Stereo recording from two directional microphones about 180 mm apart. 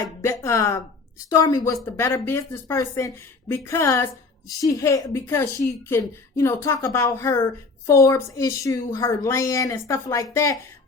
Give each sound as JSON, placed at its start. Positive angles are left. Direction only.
{"t": 0.2, "sound": "music", "side_deg": 15}
{"t": 1.3, "sound": "a woman's voice", "side_deg": 20}